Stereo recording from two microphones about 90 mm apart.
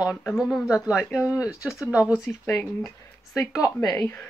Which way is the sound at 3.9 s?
20° left (ahead or behind).